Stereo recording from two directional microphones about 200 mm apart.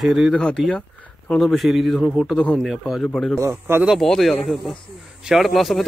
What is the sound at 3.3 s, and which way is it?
A man's voice, 15° right (ahead or behind).